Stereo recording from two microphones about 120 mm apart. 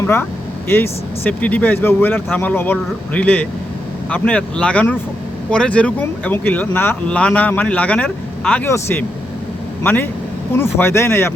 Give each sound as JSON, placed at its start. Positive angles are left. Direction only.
{"t": 0.0, "sound": "speech", "side_deg": 20}